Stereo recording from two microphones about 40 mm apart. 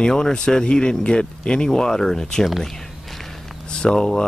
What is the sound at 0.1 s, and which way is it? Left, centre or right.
Speech, centre.